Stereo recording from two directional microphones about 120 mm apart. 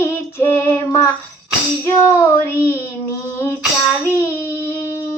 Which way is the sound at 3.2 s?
20° left (ahead or behind).